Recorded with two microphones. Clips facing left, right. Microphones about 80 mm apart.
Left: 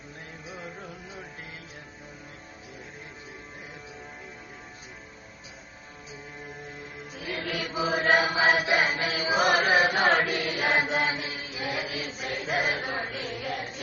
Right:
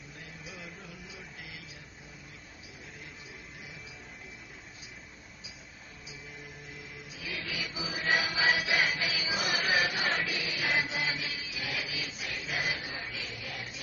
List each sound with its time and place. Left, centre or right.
0.4 s music: left
7.1 s mantra: left